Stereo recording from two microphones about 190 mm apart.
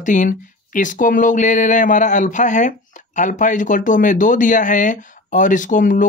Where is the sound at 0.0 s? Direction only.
40° left (ahead or behind).